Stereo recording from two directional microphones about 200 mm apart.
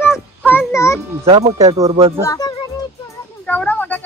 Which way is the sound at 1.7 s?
15° right (ahead or behind).